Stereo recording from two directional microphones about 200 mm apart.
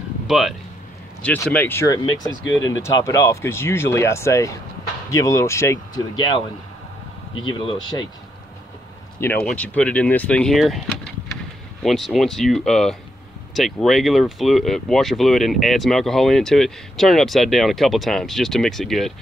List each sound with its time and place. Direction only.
0.3 s speech: centre (ahead or behind)
9.2 s speech: 10° left (ahead or behind)